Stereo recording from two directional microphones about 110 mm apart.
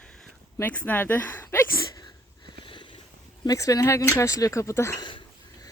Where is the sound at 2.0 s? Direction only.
45° left (ahead or behind).